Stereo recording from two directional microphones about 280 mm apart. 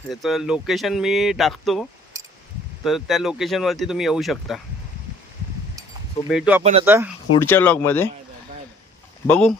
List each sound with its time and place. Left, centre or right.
0.1 s speech: centre
6.2 s speech: centre
6.6 s speech: right
6.8 s speech: centre
7.4 s speech: centre
9.2 s speech: centre